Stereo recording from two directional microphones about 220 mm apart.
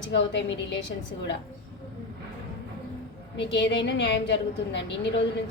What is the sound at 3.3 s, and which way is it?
A woman's voice, 55° left (ahead or behind).